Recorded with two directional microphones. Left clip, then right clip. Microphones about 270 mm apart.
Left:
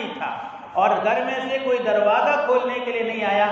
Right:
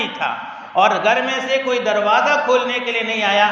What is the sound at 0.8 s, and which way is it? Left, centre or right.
Speech, right.